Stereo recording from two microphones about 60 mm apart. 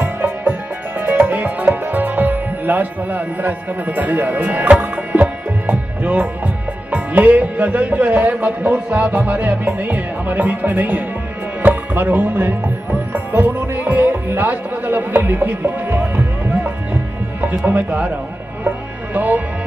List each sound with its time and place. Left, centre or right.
0.0 s music: right
6.9 s speech: right
13.1 s music: right
17.6 s speech: right
19.1 s speech: right